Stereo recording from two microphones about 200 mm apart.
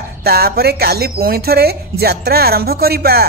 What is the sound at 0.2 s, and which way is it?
A man's voice, 50° right (ahead or behind).